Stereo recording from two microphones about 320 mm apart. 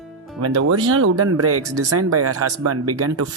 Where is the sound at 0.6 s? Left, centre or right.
Right.